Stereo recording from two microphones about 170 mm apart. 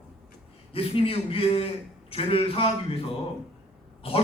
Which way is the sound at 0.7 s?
35° left (ahead or behind).